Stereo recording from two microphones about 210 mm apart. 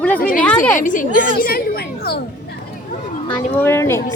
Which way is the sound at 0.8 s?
40° left (ahead or behind).